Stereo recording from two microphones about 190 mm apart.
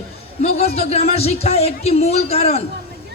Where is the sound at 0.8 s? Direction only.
35° left (ahead or behind).